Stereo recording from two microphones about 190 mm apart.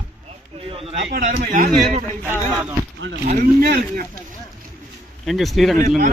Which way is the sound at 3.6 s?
55° right (ahead or behind).